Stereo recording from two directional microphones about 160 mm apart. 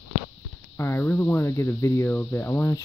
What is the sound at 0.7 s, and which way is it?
Speech, 15° left (ahead or behind).